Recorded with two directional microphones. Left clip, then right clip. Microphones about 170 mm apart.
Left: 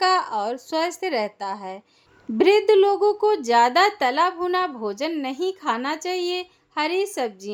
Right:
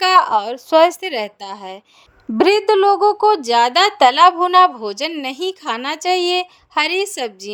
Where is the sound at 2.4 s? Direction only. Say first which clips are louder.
Right 3 dB; 25° right (ahead or behind).